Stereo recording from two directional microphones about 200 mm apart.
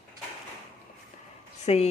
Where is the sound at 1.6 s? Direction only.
30° left (ahead or behind).